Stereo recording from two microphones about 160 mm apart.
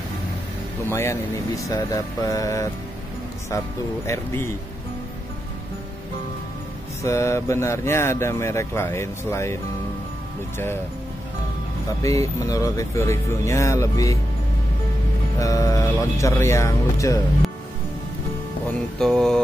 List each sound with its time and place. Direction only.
0.8 s speech: 15° left (ahead or behind)
4.1 s speech: 15° left (ahead or behind)
7.0 s speech: 20° left (ahead or behind)
12.0 s speech: 20° left (ahead or behind)
15.3 s speech: 20° left (ahead or behind)
18.9 s mantra: 5° left (ahead or behind)